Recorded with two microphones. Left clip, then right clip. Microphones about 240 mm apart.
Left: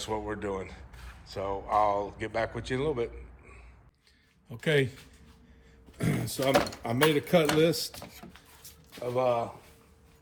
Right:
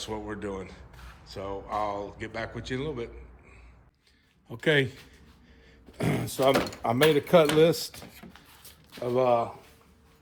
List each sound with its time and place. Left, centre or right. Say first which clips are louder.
0.0 s speech: left 2 dB; centre
4.4 s speech: right 3 dB; right
6.0 s a sound: right 3 dB; right
6.8 s speech: right 3 dB; right
9.0 s speech: right 3 dB; right